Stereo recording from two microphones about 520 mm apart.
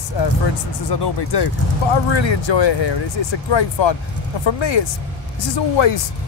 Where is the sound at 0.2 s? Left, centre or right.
Left.